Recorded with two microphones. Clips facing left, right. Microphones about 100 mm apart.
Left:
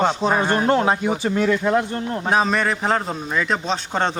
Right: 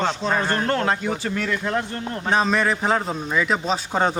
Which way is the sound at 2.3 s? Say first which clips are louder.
Even; centre (ahead or behind).